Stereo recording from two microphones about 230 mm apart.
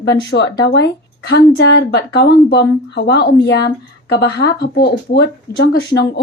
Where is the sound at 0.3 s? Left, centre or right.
Left.